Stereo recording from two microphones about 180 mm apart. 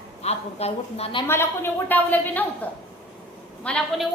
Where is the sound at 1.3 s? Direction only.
15° left (ahead or behind).